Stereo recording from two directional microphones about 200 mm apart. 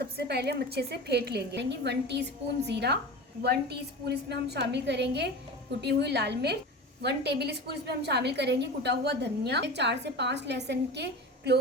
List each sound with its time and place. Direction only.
0.0 s a woman's voice: 55° right (ahead or behind)